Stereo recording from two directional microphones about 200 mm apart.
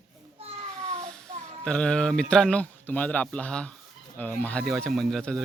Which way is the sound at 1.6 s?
5° left (ahead or behind).